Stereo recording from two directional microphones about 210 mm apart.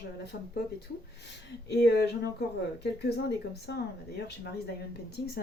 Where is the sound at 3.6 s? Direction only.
55° left (ahead or behind).